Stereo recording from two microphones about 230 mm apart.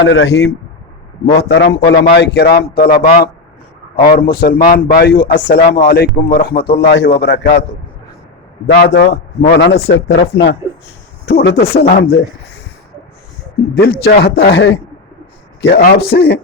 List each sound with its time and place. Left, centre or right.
0.0 s a man's voice: left
8.7 s a man's voice: left
13.8 s a man's voice: left